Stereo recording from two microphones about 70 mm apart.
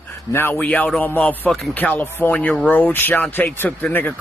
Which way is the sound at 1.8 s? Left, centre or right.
Left.